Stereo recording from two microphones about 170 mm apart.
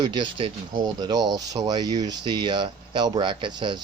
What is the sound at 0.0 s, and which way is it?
Speech, 25° right (ahead or behind).